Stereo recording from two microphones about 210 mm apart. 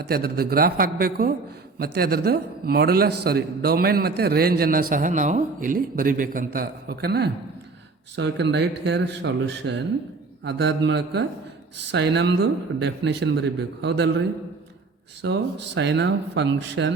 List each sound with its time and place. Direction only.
0.0 s a man's voice: 45° right (ahead or behind)
15.2 s speech: 55° right (ahead or behind)